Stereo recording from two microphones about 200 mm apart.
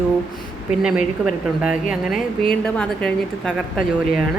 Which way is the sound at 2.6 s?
5° left (ahead or behind).